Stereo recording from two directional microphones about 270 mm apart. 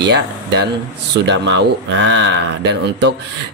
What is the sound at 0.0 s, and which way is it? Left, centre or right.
Speech, right.